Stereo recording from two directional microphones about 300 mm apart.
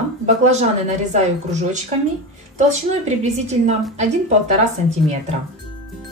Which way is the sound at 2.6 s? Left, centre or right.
Right.